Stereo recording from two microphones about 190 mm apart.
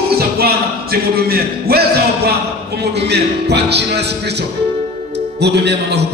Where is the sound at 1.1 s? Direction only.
55° right (ahead or behind).